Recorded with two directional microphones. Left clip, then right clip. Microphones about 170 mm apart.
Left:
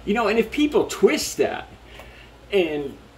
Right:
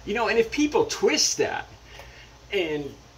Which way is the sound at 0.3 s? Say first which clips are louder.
Left 1 dB; 15° left (ahead or behind).